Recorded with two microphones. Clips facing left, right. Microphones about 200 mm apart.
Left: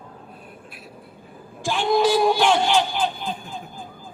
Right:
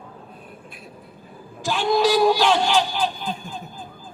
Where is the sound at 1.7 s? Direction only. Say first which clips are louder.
Even; 15° left (ahead or behind).